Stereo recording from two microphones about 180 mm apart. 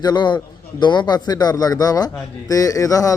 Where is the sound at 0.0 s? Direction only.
25° left (ahead or behind).